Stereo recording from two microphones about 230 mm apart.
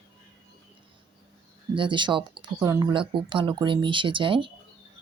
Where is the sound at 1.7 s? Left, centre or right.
Right.